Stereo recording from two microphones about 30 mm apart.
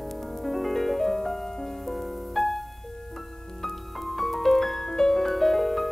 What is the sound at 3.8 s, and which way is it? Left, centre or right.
Music, centre.